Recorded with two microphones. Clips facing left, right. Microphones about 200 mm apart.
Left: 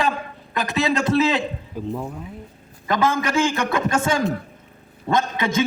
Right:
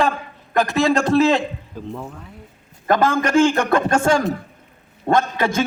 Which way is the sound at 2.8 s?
50° right (ahead or behind).